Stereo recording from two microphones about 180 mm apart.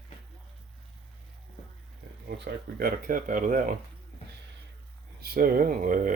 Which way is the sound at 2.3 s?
60° right (ahead or behind).